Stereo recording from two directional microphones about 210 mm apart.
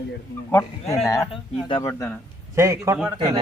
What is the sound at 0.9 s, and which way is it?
A man's voice, 15° left (ahead or behind).